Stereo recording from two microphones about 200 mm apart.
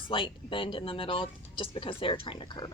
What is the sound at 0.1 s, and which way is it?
Speech, 25° left (ahead or behind).